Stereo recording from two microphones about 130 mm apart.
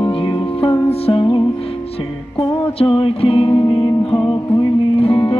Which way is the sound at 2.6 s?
45° left (ahead or behind).